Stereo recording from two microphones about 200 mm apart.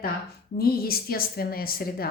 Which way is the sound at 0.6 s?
50° left (ahead or behind).